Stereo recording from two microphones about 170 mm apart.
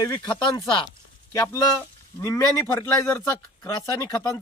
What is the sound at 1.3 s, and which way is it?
Speech, 15° left (ahead or behind).